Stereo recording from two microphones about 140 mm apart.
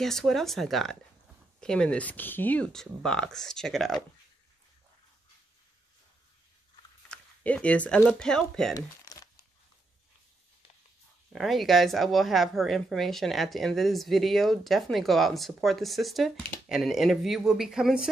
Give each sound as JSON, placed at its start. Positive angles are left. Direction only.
{"t": 0.0, "sound": "a woman's voice", "side_deg": 0}
{"t": 7.1, "sound": "a sound", "side_deg": 10}
{"t": 8.0, "sound": "a woman's voice", "side_deg": 5}
{"t": 8.7, "sound": "crumpling", "side_deg": 25}
{"t": 11.3, "sound": "a woman's voice", "side_deg": 0}